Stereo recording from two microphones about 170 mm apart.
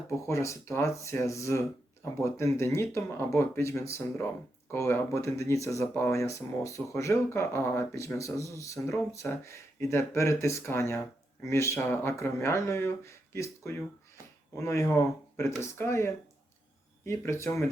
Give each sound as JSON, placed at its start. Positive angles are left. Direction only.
{"t": 0.2, "sound": "speech", "side_deg": 15}